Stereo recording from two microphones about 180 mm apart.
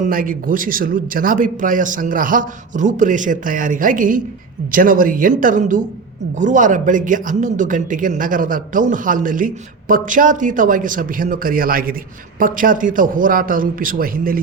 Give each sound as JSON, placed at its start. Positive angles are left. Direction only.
{"t": 0.0, "sound": "speech", "side_deg": -50}